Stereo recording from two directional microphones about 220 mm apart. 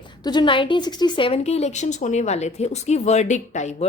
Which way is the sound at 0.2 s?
20° left (ahead or behind).